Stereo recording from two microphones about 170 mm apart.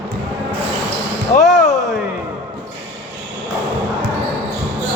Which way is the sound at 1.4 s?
45° left (ahead or behind).